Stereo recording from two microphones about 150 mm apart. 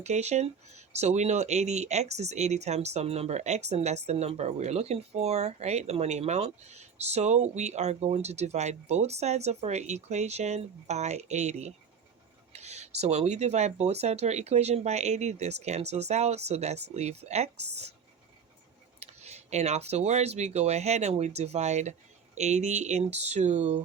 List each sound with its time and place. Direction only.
0.0 s speech: 45° right (ahead or behind)
18.9 s speech: 45° right (ahead or behind)